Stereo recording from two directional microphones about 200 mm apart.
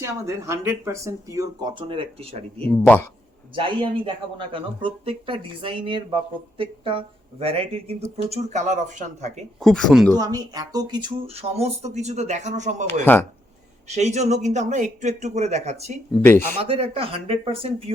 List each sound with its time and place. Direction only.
0.0 s speech: 15° right (ahead or behind)
1.9 s speech: 30° right (ahead or behind)
2.6 s speech: 5° left (ahead or behind)
3.5 s speech: 25° right (ahead or behind)
9.6 s speech: centre (ahead or behind)
10.2 s speech: 20° right (ahead or behind); by 12.7 s 35° right (ahead or behind)
12.9 s speech: 10° left (ahead or behind)
13.8 s speech: 35° right (ahead or behind)
16.1 s speech: 5° left (ahead or behind)
16.6 s speech: 25° right (ahead or behind)